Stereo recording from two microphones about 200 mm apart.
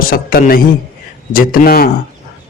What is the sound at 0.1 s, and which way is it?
A man's voice, 45° left (ahead or behind).